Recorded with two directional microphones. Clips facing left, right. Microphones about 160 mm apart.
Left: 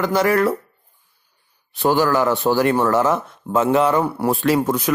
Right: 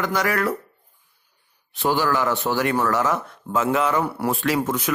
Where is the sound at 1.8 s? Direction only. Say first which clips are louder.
Left 4 dB; 45° left (ahead or behind).